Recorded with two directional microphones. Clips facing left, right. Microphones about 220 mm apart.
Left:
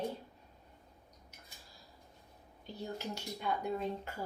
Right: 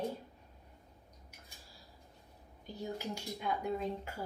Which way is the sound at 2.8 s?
10° right (ahead or behind).